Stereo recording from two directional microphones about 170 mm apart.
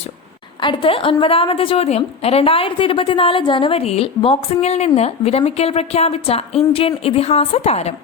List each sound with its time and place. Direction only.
0.6 s a woman's voice: 30° left (ahead or behind)